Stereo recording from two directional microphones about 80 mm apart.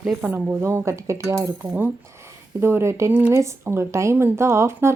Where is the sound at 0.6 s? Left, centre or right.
Right.